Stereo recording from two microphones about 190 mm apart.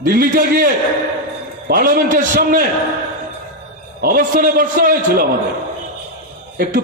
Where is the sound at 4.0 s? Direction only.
50° right (ahead or behind).